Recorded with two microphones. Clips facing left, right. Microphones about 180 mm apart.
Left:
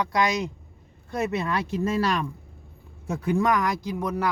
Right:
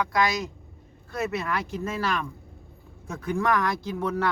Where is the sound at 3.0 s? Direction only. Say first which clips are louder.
Left 3 dB; 15° left (ahead or behind).